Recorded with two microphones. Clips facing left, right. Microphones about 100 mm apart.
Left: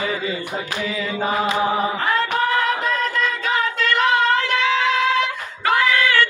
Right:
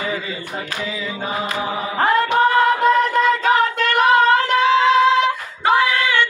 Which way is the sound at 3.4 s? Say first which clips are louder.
Right 5 dB; 45° right (ahead or behind).